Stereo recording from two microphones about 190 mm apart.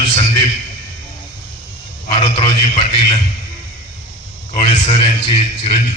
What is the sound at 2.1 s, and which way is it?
A man's voice, 30° left (ahead or behind).